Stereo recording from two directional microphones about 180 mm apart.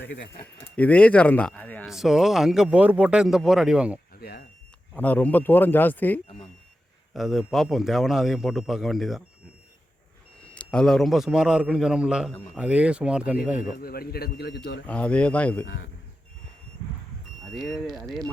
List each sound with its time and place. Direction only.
0.6 s speech: 10° left (ahead or behind)
1.9 s speech: centre (ahead or behind)
4.2 s a sound: 60° left (ahead or behind)
4.9 s speech: 10° left (ahead or behind)
7.1 s speech: centre (ahead or behind)
10.4 s speech: 5° left (ahead or behind)
13.8 s a man's voice: 55° left (ahead or behind)
14.8 s speech: 5° left (ahead or behind)
17.4 s speech: centre (ahead or behind)